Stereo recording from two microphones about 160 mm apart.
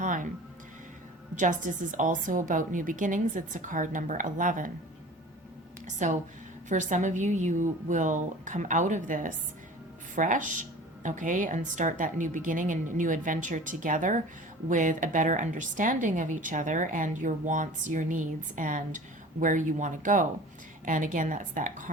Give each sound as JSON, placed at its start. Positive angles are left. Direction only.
{"t": 0.0, "sound": "music", "side_deg": -55}
{"t": 1.4, "sound": "a woman's voice", "side_deg": -55}
{"t": 6.0, "sound": "a woman's voice", "side_deg": -50}